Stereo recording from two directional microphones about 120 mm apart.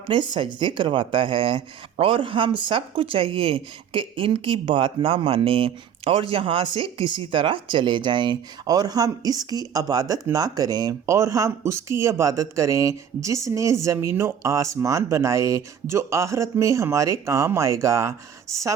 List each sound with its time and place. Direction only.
0.1 s speech: 40° right (ahead or behind); by 18.1 s 25° right (ahead or behind)